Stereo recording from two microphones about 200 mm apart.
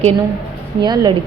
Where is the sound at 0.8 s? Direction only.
20° right (ahead or behind).